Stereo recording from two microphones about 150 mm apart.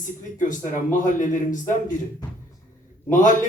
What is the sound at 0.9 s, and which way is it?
A man's voice, 55° left (ahead or behind).